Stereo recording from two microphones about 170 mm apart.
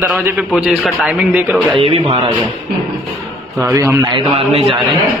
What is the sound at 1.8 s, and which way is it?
Speech, 35° right (ahead or behind).